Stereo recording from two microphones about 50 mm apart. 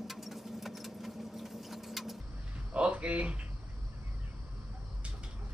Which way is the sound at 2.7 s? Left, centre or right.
Right.